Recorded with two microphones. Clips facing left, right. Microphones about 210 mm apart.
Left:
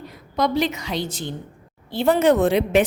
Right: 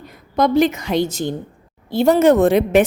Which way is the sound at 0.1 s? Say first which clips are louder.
Right 5 dB; 50° right (ahead or behind).